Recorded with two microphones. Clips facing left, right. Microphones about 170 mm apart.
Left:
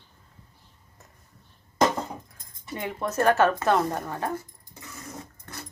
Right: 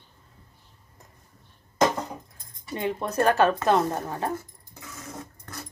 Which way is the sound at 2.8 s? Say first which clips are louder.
Right 2 dB; 25° right (ahead or behind).